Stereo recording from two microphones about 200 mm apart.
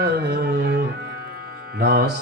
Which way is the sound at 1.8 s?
55° right (ahead or behind).